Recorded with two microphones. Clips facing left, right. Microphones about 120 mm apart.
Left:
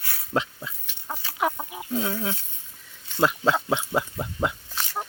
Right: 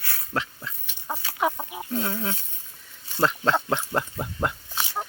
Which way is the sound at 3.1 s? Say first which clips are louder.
Left 1 dB; 5° left (ahead or behind).